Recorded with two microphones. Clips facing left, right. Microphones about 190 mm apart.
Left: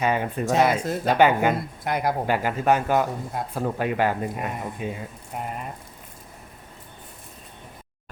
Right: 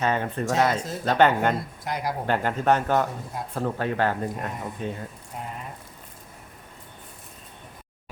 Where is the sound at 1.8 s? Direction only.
60° left (ahead or behind).